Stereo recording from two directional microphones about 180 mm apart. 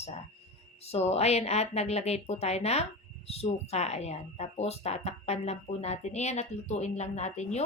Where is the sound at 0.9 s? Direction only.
35° left (ahead or behind).